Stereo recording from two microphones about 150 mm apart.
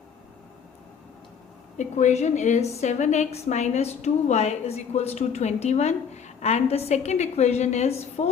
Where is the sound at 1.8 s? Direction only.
55° left (ahead or behind).